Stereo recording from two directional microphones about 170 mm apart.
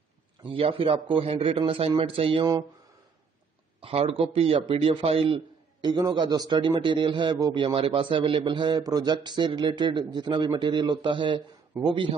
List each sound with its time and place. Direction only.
0.4 s a man's voice: 30° right (ahead or behind)
3.8 s a man's voice: 35° right (ahead or behind)